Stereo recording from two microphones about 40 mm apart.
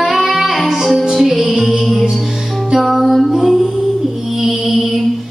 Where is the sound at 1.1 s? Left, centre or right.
Centre.